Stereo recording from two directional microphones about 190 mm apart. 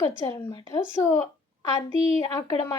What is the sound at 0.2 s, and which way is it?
Speech, 20° left (ahead or behind).